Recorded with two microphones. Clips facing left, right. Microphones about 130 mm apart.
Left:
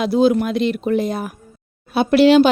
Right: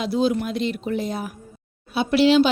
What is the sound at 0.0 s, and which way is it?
Speech, 60° left (ahead or behind).